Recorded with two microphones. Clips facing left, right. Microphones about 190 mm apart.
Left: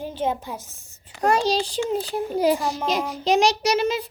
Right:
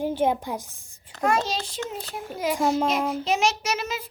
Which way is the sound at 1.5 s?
35° left (ahead or behind).